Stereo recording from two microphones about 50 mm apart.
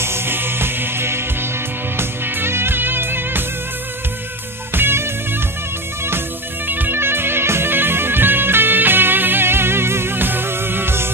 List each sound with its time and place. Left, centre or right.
0.0 s music: right
4.7 s music: right
6.7 s music: right